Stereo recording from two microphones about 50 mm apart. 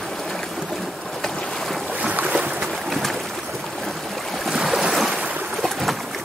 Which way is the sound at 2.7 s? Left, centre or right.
Centre.